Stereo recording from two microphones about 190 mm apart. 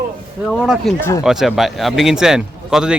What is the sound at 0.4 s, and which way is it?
Speech, centre (ahead or behind).